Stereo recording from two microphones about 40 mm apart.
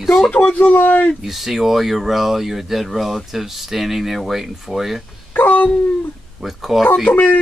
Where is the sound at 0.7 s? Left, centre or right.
Left.